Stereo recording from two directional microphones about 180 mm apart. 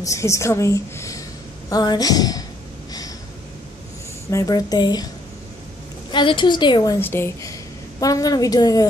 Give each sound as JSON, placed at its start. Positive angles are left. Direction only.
{"t": 0.0, "sound": "a woman's voice", "side_deg": 15}
{"t": 4.3, "sound": "a woman's voice", "side_deg": 20}
{"t": 6.1, "sound": "a woman's voice", "side_deg": 25}